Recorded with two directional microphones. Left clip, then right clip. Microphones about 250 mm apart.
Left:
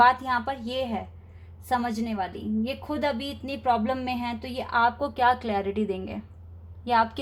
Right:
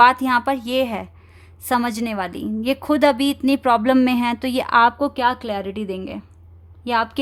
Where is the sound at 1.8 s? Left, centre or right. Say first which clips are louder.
Right 6 dB; right.